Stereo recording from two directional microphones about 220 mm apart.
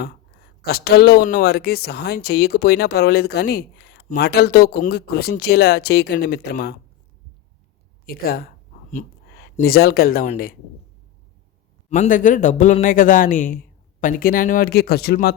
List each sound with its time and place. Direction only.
0.6 s speech: 45° left (ahead or behind)
8.0 s speech: 45° left (ahead or behind)
11.9 s a man's voice: 35° left (ahead or behind)